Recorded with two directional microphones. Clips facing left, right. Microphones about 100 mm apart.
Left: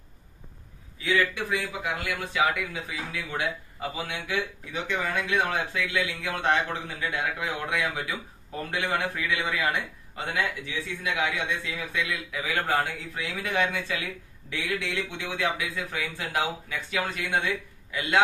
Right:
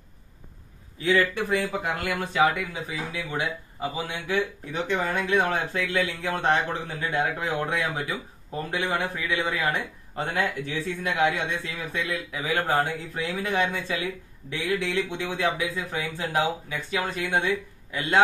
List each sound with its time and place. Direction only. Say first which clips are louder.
0.9 s speech: right 3 dB; 40° right (ahead or behind)
2.3 s a man's voice: right 3 dB; 30° right (ahead or behind)
4.8 s a man's voice: right 3 dB; 40° right (ahead or behind)
10.2 s speech: right 2 dB; 45° right (ahead or behind)